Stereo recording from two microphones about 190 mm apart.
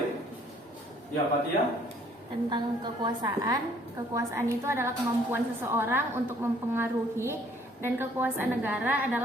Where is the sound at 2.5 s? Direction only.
25° right (ahead or behind).